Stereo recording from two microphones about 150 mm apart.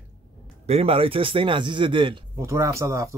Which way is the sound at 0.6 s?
45° right (ahead or behind).